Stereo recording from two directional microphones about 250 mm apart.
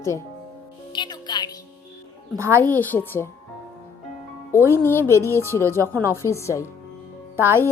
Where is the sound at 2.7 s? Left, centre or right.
Centre.